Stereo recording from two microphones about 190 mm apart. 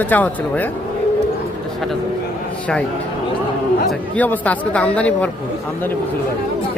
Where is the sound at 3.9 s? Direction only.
10° left (ahead or behind).